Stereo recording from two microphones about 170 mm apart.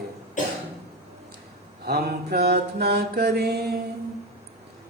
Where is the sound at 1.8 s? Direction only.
70° right (ahead or behind).